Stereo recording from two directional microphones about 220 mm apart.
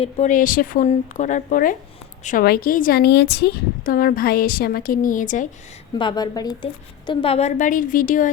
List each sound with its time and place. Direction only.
0.0 s a woman's voice: 35° left (ahead or behind)
6.0 s a woman's voice: 20° left (ahead or behind); by 8.3 s 35° left (ahead or behind)